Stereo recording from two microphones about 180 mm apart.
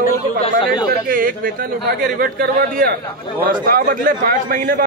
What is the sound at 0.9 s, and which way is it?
Speech, 50° right (ahead or behind).